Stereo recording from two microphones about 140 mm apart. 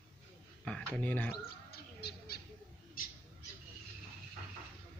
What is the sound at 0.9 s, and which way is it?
Speech, 10° left (ahead or behind).